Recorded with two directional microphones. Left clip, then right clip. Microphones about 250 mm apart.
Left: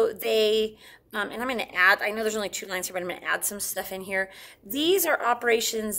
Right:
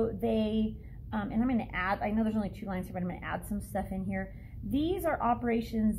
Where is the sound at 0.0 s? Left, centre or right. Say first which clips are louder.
Left 8 dB; left.